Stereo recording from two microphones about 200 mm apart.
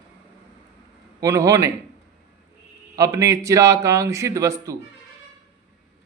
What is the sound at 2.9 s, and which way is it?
A man's voice, 15° right (ahead or behind).